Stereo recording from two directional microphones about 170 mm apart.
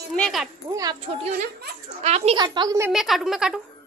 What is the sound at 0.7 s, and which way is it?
Speech, 20° right (ahead or behind).